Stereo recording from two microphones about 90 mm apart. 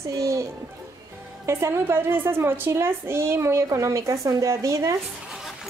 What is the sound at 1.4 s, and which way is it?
A woman's voice, 30° right (ahead or behind).